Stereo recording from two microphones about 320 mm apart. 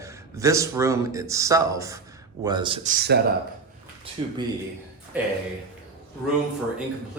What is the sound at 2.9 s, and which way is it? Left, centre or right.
Speech, right.